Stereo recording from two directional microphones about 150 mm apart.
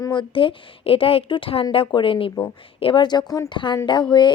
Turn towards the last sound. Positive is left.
turn(degrees=30)  # may be behind; listen again after turning